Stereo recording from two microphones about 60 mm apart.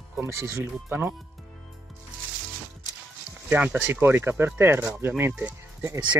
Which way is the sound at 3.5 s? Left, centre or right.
Right.